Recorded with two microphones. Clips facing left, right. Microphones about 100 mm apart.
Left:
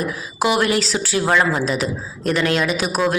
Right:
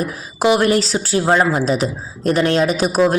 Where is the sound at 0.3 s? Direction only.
40° right (ahead or behind).